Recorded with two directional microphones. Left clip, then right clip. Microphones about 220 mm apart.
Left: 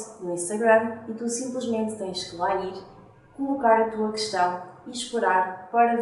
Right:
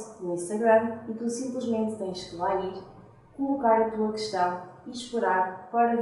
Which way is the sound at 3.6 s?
15° right (ahead or behind).